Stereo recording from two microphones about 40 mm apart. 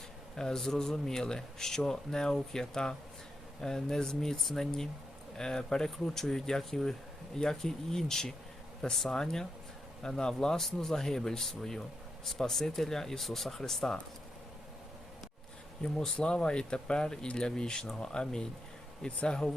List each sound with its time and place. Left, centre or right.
0.3 s speech: centre
16.1 s speech: left